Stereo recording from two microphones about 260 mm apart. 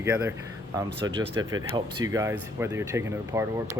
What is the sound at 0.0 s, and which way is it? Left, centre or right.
Speech, centre.